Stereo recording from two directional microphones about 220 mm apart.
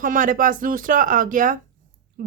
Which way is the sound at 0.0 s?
40° right (ahead or behind).